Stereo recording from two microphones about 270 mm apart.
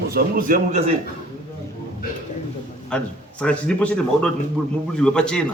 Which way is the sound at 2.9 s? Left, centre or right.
Centre.